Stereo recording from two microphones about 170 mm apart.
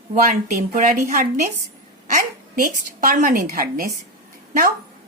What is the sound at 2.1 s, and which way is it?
A woman's voice, 50° right (ahead or behind).